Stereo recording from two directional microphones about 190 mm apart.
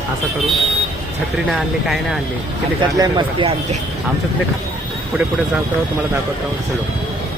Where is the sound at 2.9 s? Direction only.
20° right (ahead or behind).